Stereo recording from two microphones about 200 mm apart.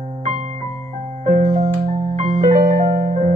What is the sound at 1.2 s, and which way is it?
Music, 35° right (ahead or behind).